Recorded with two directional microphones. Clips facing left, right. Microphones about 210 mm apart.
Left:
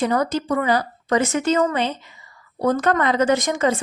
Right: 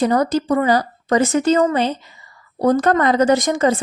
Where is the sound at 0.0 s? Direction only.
40° right (ahead or behind).